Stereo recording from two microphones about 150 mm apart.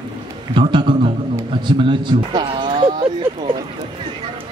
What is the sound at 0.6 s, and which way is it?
A man's voice, 35° right (ahead or behind).